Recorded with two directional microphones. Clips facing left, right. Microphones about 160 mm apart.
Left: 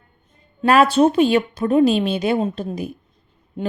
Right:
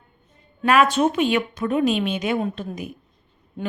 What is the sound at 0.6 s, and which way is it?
Speech, 35° left (ahead or behind).